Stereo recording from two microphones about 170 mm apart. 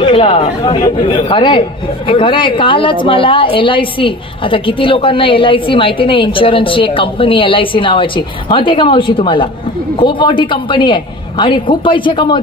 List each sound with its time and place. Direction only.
0.0 s a woman's voice: 30° left (ahead or behind)